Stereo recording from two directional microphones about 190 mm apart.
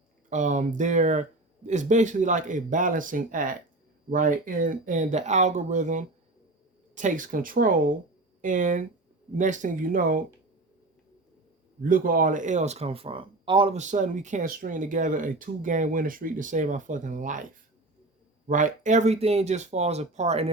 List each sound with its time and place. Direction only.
0.3 s speech: 40° right (ahead or behind)
11.8 s speech: 45° right (ahead or behind)